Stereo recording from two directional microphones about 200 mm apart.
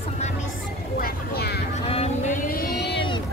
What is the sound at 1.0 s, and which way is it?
Vehicle, 50° left (ahead or behind).